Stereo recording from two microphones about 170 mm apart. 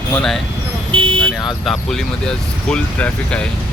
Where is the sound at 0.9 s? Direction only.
30° right (ahead or behind).